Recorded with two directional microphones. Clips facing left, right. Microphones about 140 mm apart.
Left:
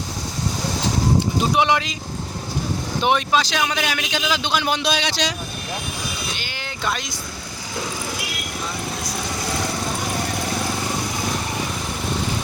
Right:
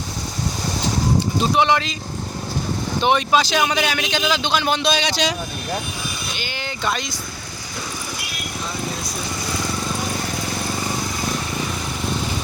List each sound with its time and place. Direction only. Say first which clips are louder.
1.4 s speech: right 3 dB; 10° left (ahead or behind)
3.0 s a man's voice: right 2 dB; centre (ahead or behind)
6.4 s boat: right 5 dB; centre (ahead or behind)